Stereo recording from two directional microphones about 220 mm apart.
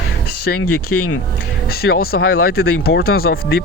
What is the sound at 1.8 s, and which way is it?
Speech, 45° left (ahead or behind).